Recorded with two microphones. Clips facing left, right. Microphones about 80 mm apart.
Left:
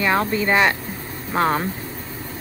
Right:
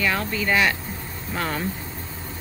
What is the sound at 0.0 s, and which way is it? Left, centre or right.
Speech, left.